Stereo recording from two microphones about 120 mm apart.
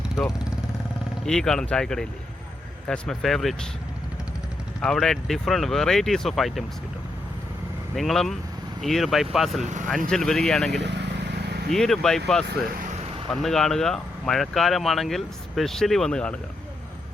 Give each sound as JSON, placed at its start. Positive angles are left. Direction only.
{"t": 1.2, "sound": "speech", "side_deg": 5}
{"t": 4.8, "sound": "speech", "side_deg": 5}
{"t": 7.9, "sound": "speech", "side_deg": 0}
{"t": 11.7, "sound": "speech", "side_deg": 5}